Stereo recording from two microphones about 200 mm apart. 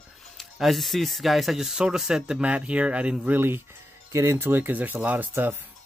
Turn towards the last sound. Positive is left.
turn(degrees=-10)  # may be behind; listen again after turning